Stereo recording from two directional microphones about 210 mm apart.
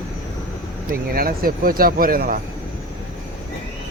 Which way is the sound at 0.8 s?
45° right (ahead or behind).